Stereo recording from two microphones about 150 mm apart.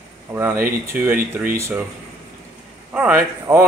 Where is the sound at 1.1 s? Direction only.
70° right (ahead or behind).